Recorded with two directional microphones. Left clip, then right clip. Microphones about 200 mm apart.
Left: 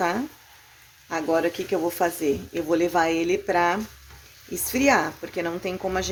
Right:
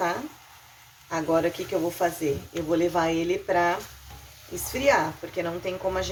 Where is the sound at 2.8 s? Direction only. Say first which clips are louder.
Left 2 dB; 50° left (ahead or behind).